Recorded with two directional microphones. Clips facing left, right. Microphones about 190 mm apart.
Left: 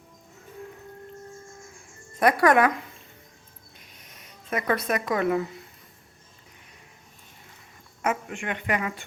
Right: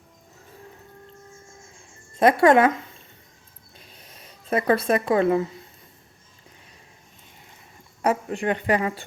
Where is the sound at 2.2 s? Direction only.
25° right (ahead or behind).